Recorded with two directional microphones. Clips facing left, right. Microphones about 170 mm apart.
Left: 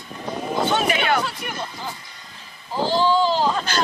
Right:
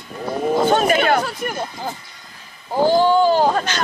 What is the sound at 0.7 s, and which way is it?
Speech, 45° right (ahead or behind).